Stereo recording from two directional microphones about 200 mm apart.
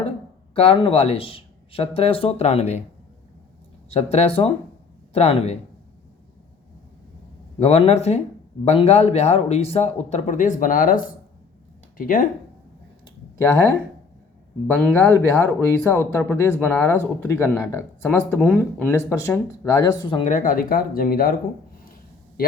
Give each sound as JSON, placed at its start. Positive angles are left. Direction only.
{"t": 0.5, "sound": "a man's voice", "side_deg": 30}
{"t": 3.8, "sound": "a man's voice", "side_deg": 30}
{"t": 7.6, "sound": "a man's voice", "side_deg": 30}
{"t": 14.8, "sound": "speech", "side_deg": 5}
{"t": 18.3, "sound": "speech", "side_deg": -5}
{"t": 18.9, "sound": "speech", "side_deg": 15}
{"t": 20.2, "sound": "speech", "side_deg": 40}